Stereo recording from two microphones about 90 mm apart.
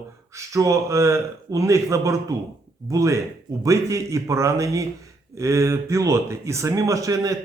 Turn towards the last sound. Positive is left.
turn(degrees=-40)  # may be behind; listen again after turning